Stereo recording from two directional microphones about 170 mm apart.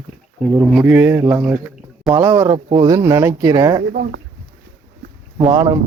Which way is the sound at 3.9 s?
65° right (ahead or behind).